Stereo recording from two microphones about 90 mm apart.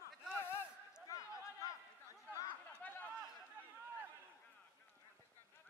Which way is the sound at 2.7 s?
20° left (ahead or behind).